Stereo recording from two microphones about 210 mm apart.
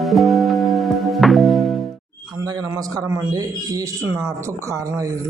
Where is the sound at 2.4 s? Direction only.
15° right (ahead or behind).